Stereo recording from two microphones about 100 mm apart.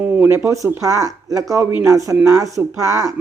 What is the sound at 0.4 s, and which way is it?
Speech, 30° right (ahead or behind).